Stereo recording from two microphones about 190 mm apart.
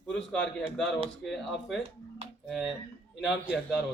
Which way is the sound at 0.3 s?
5° left (ahead or behind).